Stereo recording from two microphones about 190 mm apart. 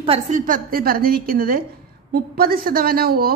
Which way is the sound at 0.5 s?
50° right (ahead or behind).